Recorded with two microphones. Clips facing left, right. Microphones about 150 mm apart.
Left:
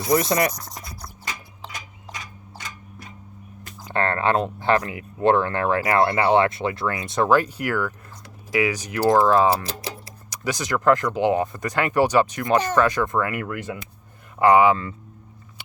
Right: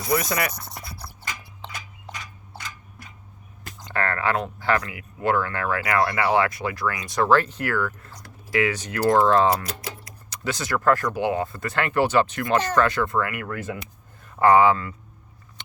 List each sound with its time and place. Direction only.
0.0 s speech: 30° left (ahead or behind)
0.5 s a sound: 5° right (ahead or behind)
3.9 s speech: 25° left (ahead or behind)
9.5 s music: 30° left (ahead or behind)
10.2 s speech: 15° left (ahead or behind)